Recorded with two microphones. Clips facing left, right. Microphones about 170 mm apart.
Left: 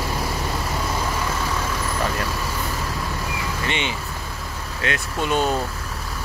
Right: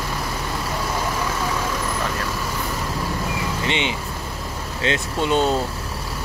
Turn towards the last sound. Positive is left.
turn(degrees=-20)  # may be behind; listen again after turning